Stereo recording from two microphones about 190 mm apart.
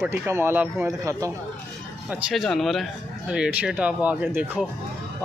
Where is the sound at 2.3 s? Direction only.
Centre (ahead or behind).